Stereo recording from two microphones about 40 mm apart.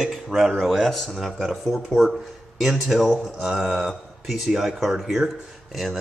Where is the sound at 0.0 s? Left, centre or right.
Centre.